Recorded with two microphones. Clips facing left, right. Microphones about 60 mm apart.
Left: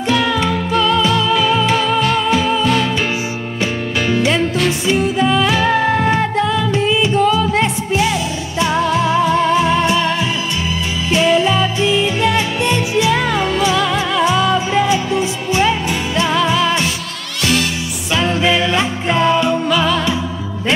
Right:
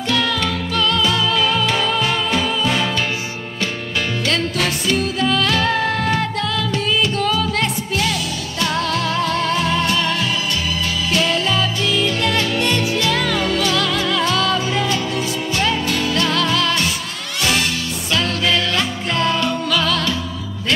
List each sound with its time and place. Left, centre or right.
0.1 s music: centre
2.6 s music: centre
4.1 s music: centre
18.1 s music: centre